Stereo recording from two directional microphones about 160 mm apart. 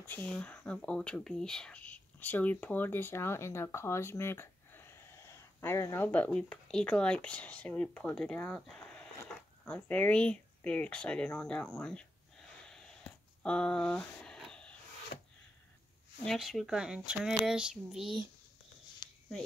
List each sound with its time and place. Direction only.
0.0 s speech: 10° left (ahead or behind)
16.3 s speech: centre (ahead or behind)
19.0 s a sound: 25° left (ahead or behind)